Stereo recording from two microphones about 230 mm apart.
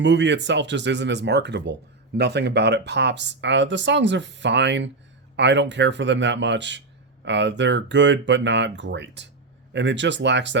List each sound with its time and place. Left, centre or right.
0.0 s speech: right